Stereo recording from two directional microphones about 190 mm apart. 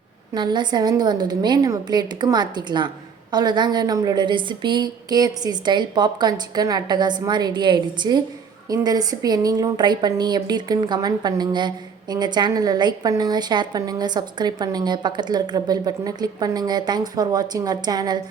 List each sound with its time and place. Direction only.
0.3 s a woman's voice: 25° right (ahead or behind)